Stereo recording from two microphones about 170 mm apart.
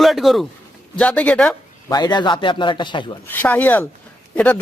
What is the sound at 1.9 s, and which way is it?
Speech, 25° left (ahead or behind).